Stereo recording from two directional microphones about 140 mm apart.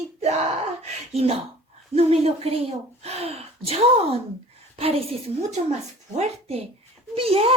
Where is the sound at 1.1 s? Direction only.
45° right (ahead or behind).